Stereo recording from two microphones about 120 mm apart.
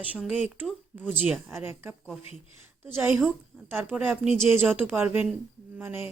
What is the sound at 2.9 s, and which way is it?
A woman's voice, 20° right (ahead or behind).